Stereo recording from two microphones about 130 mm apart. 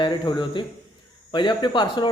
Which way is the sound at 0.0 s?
35° left (ahead or behind).